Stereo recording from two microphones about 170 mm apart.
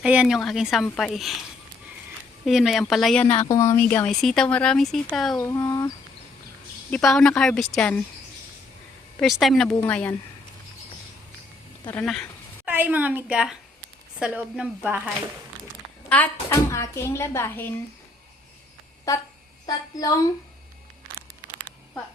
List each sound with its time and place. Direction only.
0.0 s speech: 5° right (ahead or behind)
2.4 s speech: centre (ahead or behind)
3.4 s speech: 15° left (ahead or behind)
4.0 s speech: centre (ahead or behind)
5.4 s speech: 20° left (ahead or behind)
6.9 s speech: 5° left (ahead or behind)
9.1 s speech: centre (ahead or behind)
12.0 s speech: 5° left (ahead or behind)
12.6 s a woman's voice: 10° right (ahead or behind)
16.0 s speech: 10° left (ahead or behind)
19.1 s speech: 20° left (ahead or behind)